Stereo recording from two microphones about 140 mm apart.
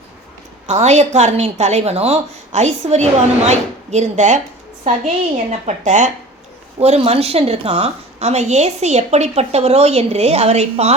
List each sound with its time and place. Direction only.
0.7 s a woman's voice: 55° right (ahead or behind)
5.5 s speech: 60° right (ahead or behind)
6.7 s a woman's voice: 45° right (ahead or behind)